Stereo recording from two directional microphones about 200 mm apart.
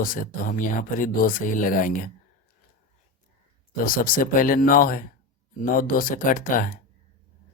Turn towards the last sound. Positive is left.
turn(degrees=45)  # may be behind; listen again after turning